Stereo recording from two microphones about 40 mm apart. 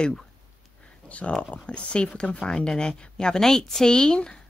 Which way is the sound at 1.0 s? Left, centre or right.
Left.